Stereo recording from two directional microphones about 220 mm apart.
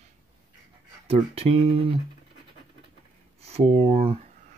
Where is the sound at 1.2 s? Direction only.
25° right (ahead or behind).